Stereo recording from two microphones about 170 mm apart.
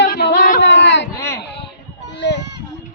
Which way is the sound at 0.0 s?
75° left (ahead or behind).